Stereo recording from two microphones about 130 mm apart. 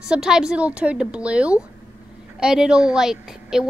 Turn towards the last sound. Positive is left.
turn(degrees=-5)  # may be behind; listen again after turning